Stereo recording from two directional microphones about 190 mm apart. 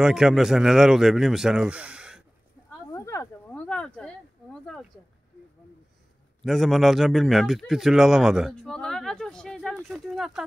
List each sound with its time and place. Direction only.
0.0 s a man's voice: 5° right (ahead or behind)
2.9 s a sound: 15° left (ahead or behind)
6.4 s a man's voice: centre (ahead or behind)